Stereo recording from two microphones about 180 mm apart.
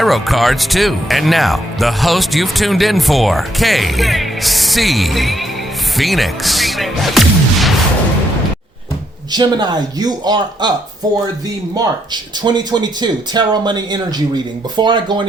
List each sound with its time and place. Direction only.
0.0 s speech: centre (ahead or behind)
9.3 s speech: 25° right (ahead or behind)